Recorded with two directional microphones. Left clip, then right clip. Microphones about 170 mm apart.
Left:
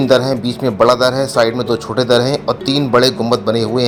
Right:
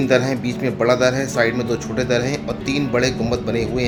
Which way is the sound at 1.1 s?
Centre (ahead or behind).